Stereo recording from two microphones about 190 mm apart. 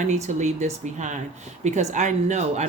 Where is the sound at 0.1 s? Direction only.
35° right (ahead or behind).